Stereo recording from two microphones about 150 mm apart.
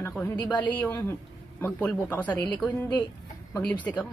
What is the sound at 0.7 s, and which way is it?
Speech, 10° left (ahead or behind).